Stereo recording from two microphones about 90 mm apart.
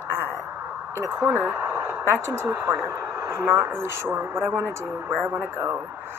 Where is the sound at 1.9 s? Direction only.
10° right (ahead or behind).